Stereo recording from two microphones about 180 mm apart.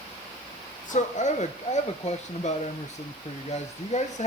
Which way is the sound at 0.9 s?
40° left (ahead or behind).